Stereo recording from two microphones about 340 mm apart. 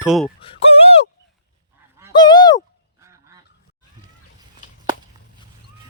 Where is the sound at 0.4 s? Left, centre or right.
Centre.